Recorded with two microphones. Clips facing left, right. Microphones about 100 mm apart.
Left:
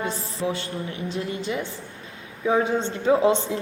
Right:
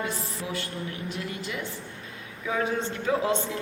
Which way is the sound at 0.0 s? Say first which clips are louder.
Left 5 dB; 30° left (ahead or behind).